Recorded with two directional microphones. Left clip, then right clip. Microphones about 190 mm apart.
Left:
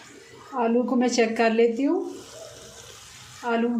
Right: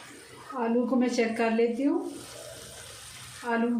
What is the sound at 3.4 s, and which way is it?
Speech, 55° left (ahead or behind).